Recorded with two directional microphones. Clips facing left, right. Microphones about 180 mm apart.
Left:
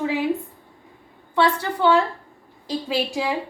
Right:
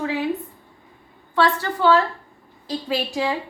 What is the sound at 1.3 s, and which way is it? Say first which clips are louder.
A woman's voice: even; 20° left (ahead or behind).